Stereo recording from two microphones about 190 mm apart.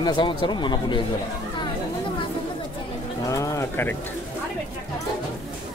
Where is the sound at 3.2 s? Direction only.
15° left (ahead or behind).